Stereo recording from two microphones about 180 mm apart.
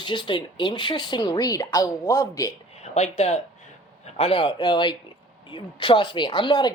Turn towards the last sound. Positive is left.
turn(degrees=25)  # may be behind; listen again after turning